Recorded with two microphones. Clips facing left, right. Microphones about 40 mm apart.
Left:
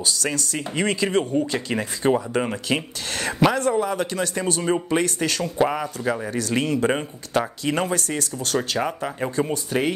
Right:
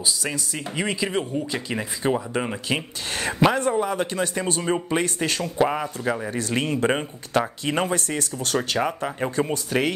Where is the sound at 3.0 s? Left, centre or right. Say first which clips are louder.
Even; right.